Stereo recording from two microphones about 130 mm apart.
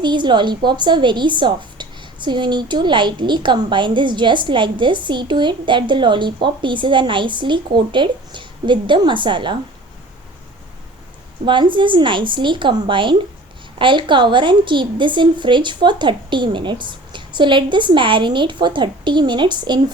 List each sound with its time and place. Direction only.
0.0 s a woman's voice: 35° right (ahead or behind)
11.4 s a woman's voice: 40° right (ahead or behind)